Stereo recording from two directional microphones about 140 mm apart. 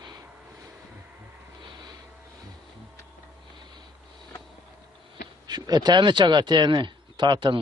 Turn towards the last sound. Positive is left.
turn(degrees=-35)  # may be behind; listen again after turning